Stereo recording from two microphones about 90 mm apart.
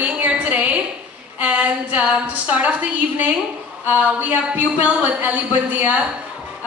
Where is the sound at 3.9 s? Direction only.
15° right (ahead or behind).